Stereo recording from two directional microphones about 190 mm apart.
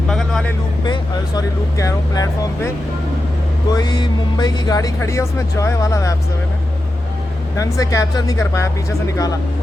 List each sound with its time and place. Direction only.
0.1 s vehicle: centre (ahead or behind)
1.4 s speech: 15° left (ahead or behind)
3.7 s speech: 20° left (ahead or behind)
7.5 s speech: 15° left (ahead or behind)